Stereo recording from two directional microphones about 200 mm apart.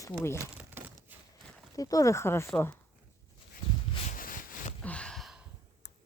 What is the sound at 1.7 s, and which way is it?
Speech, 15° left (ahead or behind).